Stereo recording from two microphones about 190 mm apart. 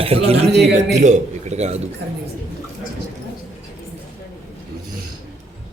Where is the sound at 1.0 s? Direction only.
40° right (ahead or behind).